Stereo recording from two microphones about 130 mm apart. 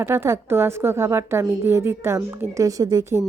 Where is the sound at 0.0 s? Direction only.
20° right (ahead or behind).